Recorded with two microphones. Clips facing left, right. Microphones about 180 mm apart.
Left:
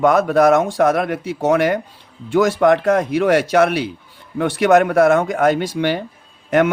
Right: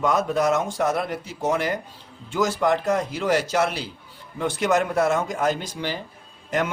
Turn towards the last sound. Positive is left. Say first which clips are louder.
# left 10 dB
turn(degrees=65)  # may be behind; listen again after turning